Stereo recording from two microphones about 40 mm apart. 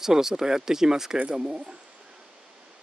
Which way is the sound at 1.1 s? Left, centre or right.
Right.